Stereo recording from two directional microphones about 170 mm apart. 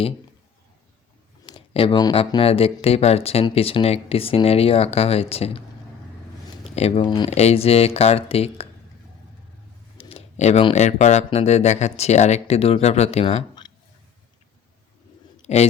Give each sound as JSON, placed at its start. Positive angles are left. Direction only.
{"t": 1.5, "sound": "speech", "side_deg": 30}
{"t": 6.7, "sound": "speech", "side_deg": 35}
{"t": 10.0, "sound": "speech", "side_deg": 35}
{"t": 15.4, "sound": "speech", "side_deg": 40}